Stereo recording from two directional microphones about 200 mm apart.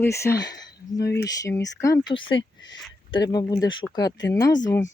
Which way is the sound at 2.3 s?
70° left (ahead or behind).